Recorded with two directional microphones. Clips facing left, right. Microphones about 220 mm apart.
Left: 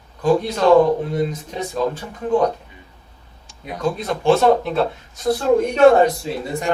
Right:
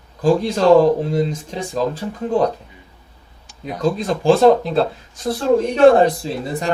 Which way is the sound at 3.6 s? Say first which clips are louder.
Right 3 dB; 30° right (ahead or behind).